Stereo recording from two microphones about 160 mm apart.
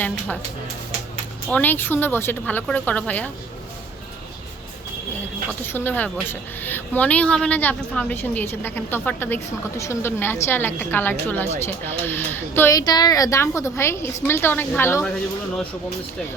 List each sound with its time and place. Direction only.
1.5 s a woman's voice: 10° left (ahead or behind)
5.5 s a woman's voice: 15° left (ahead or behind)